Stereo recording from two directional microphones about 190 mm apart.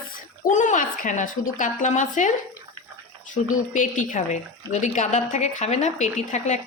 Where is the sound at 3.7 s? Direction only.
45° left (ahead or behind).